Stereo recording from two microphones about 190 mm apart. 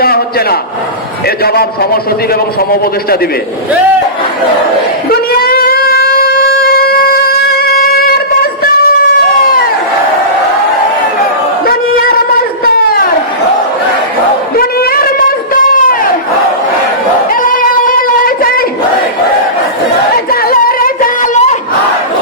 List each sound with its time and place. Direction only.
0.0 s a man's voice: 55° left (ahead or behind)
5.1 s shofar: 55° left (ahead or behind)
11.6 s a sound: 50° left (ahead or behind)
14.5 s a sound: 50° left (ahead or behind)
17.4 s music: 45° left (ahead or behind)
20.3 s music: 50° left (ahead or behind)